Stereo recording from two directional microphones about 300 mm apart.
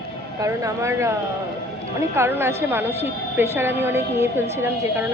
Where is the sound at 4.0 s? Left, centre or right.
Left.